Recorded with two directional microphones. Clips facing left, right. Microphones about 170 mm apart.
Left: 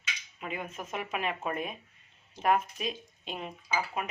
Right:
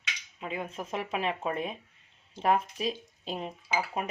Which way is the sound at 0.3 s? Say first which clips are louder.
Right 2 dB; 30° right (ahead or behind).